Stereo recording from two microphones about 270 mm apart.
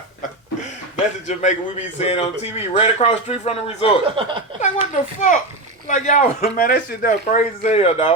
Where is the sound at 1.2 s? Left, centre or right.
Left.